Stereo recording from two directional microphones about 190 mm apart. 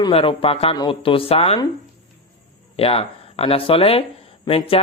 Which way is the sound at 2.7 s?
30° left (ahead or behind).